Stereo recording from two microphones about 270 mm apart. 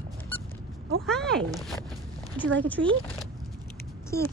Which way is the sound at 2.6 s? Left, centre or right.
Centre.